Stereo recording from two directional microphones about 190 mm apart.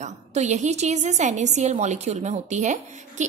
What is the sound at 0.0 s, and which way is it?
A woman's voice, 35° right (ahead or behind).